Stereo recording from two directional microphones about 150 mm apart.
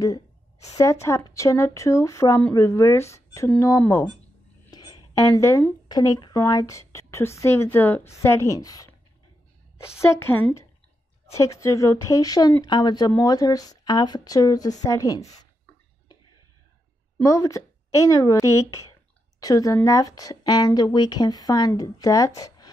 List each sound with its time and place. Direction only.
1.0 s a woman's voice: 20° left (ahead or behind)
9.9 s a woman's voice: 20° left (ahead or behind)
17.2 s a woman's voice: 20° left (ahead or behind)